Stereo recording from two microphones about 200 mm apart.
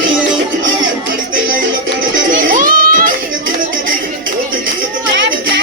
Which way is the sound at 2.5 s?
45° right (ahead or behind).